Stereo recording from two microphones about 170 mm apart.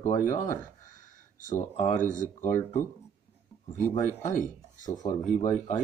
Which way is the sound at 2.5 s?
15° left (ahead or behind).